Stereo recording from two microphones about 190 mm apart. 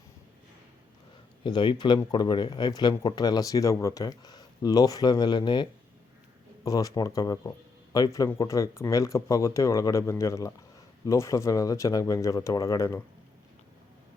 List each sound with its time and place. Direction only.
1.5 s speech: 25° left (ahead or behind)
6.7 s speech: 20° left (ahead or behind)